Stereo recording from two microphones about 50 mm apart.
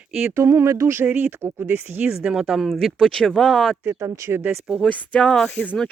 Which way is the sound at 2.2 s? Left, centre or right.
Centre.